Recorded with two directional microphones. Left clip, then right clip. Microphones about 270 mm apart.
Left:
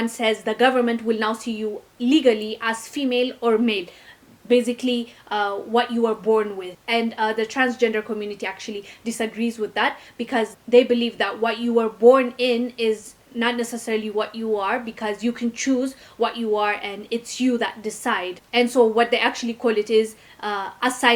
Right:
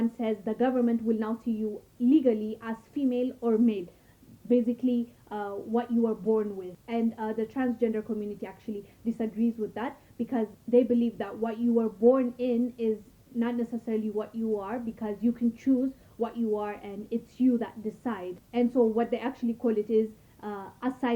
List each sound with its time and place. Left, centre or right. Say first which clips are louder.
0.0 s speech: left 9 dB; centre
11.8 s speech: left 9 dB; centre
12.1 s speech: left 9 dB; centre